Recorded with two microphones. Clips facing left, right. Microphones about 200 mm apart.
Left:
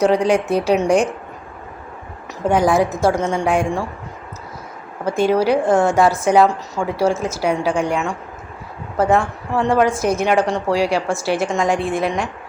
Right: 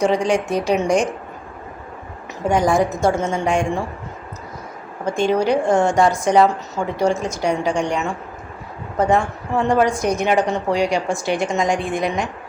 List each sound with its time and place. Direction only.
0.5 s a woman's voice: 5° left (ahead or behind)
2.4 s a woman's voice: 5° left (ahead or behind)
5.0 s a woman's voice: 5° left (ahead or behind)